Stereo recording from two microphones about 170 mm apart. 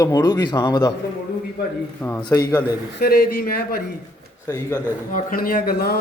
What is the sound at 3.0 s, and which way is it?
Speech, 65° left (ahead or behind).